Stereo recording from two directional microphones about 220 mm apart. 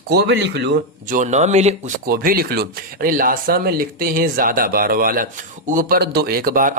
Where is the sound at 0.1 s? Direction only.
50° right (ahead or behind).